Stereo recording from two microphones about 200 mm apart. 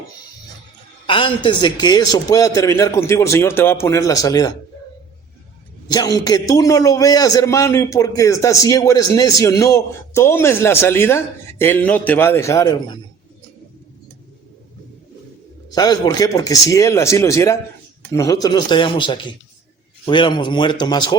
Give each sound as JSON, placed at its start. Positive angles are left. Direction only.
{"t": 1.0, "sound": "a man's voice", "side_deg": 25}
{"t": 5.9, "sound": "a man's voice", "side_deg": 20}
{"t": 15.7, "sound": "a man's voice", "side_deg": 20}